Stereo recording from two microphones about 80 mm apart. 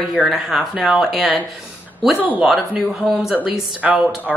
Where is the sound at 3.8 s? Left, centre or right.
Right.